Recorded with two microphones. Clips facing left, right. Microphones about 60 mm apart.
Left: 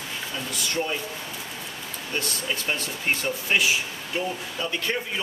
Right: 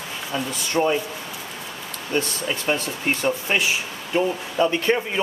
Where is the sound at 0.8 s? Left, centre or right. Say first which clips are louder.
Right 9 dB; right.